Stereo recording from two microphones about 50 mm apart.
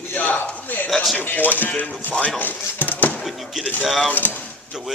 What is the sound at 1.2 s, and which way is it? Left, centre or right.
Speech, left.